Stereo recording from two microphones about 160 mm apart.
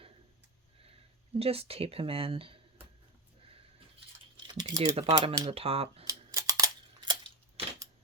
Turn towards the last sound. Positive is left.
turn(degrees=-30)  # may be behind; listen again after turning